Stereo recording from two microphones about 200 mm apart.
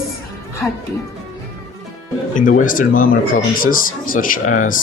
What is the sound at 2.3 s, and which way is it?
Speech, 40° left (ahead or behind).